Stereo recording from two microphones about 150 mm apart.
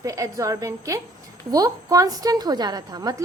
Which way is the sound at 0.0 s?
20° right (ahead or behind).